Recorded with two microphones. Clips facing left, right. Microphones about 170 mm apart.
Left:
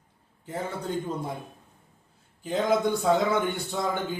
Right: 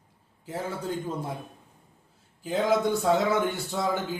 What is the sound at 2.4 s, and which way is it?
Speech, 5° right (ahead or behind).